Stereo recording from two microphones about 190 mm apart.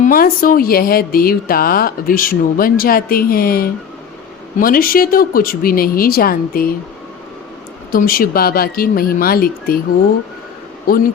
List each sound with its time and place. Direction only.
0.0 s speech: 50° left (ahead or behind)
7.9 s speech: 50° left (ahead or behind)
10.9 s speech: 50° left (ahead or behind)